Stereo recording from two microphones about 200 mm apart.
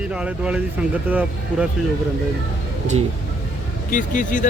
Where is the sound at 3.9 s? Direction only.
40° left (ahead or behind).